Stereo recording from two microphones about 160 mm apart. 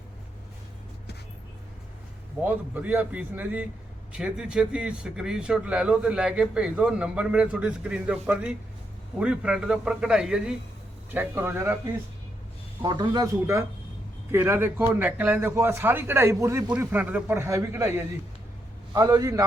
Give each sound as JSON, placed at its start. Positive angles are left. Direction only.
{"t": 2.4, "sound": "a man's voice", "side_deg": -10}
{"t": 12.8, "sound": "a man's voice", "side_deg": -25}